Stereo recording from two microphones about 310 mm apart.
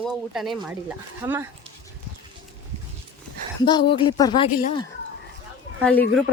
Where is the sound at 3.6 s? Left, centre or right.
Centre.